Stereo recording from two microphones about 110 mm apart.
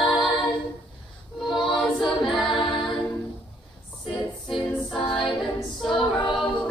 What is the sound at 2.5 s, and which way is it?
Music, 45° left (ahead or behind).